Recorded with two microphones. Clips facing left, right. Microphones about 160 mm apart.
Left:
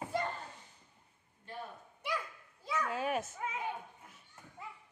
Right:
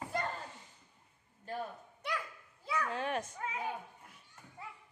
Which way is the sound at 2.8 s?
5° left (ahead or behind).